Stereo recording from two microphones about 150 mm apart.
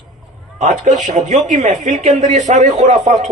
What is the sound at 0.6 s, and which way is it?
A man's voice, 55° right (ahead or behind).